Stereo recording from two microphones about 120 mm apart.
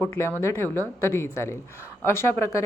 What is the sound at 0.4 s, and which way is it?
A woman's voice, 20° left (ahead or behind).